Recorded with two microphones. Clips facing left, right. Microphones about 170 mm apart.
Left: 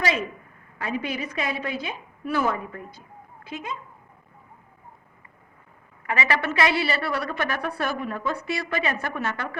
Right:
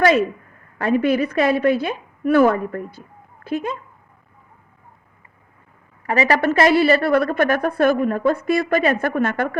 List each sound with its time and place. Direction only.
0.8 s a woman's voice: 60° right (ahead or behind)
6.1 s a woman's voice: 40° right (ahead or behind)